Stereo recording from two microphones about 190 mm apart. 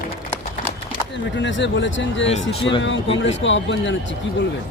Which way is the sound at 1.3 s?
75° left (ahead or behind).